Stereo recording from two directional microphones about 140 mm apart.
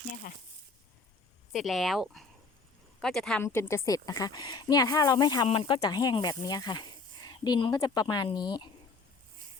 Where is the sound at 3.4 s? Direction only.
15° left (ahead or behind).